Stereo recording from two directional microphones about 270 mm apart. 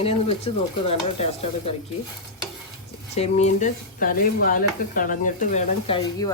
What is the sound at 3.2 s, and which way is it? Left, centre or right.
Speech, left.